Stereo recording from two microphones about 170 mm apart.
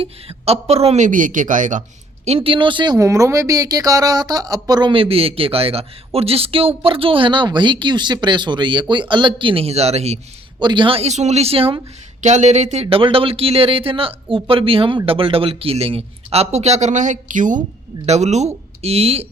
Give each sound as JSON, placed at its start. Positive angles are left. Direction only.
{"t": 0.0, "sound": "speech", "side_deg": -35}
{"t": 2.2, "sound": "speech", "side_deg": -35}
{"t": 10.6, "sound": "speech", "side_deg": -25}
{"t": 12.2, "sound": "speech", "side_deg": -45}